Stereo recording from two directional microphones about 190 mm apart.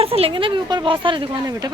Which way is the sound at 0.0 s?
30° right (ahead or behind).